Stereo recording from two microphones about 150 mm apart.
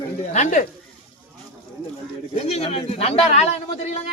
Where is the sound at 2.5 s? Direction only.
45° left (ahead or behind).